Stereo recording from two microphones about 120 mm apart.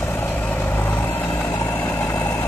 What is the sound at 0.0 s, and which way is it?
Vehicle, 20° left (ahead or behind).